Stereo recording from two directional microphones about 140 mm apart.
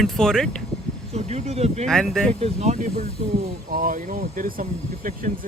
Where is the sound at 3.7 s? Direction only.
85° right.